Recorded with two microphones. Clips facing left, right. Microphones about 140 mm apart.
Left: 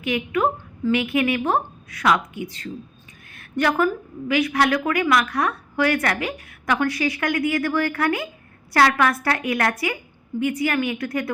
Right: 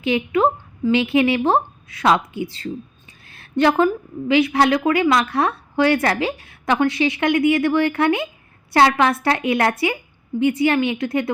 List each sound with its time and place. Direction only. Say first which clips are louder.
0.0 s a woman's voice: right 4 dB; 25° right (ahead or behind)